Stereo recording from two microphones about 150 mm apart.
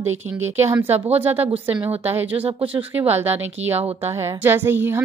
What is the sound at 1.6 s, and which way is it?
Speech, 10° right (ahead or behind).